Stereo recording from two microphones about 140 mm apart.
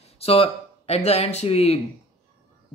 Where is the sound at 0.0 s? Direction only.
45° left (ahead or behind).